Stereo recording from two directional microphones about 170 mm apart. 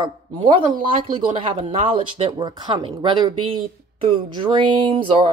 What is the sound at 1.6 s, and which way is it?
Speech, 35° right (ahead or behind).